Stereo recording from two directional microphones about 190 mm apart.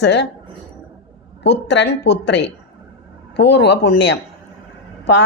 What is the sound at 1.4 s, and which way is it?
Speech, 65° left (ahead or behind).